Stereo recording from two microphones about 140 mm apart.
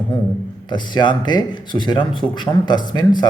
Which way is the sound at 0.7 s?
30° left (ahead or behind).